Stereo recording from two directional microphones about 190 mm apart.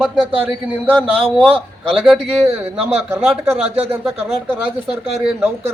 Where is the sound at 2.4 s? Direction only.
35° right (ahead or behind).